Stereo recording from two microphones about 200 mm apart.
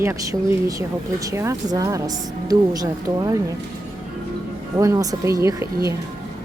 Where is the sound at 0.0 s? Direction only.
15° right (ahead or behind).